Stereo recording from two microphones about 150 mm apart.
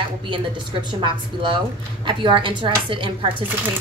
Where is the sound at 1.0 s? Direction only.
35° right (ahead or behind).